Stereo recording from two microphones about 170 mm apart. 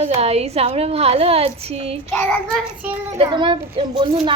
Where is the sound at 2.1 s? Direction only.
15° left (ahead or behind).